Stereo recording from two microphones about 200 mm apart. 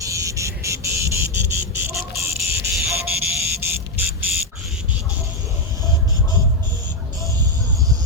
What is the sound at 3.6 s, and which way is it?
Music, 10° right (ahead or behind).